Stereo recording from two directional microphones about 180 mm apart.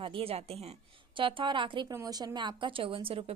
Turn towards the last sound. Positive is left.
turn(degrees=-30)  # may be behind; listen again after turning